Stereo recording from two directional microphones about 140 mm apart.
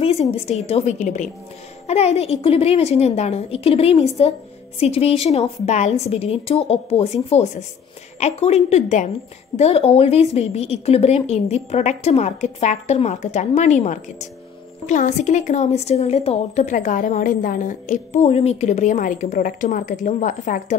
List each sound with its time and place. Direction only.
0.0 s a woman's voice: 45° left (ahead or behind)
1.9 s a woman's voice: 50° left (ahead or behind); by 20.7 s 65° left (ahead or behind)